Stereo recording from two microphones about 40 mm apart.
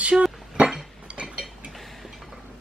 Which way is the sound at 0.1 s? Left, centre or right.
Centre.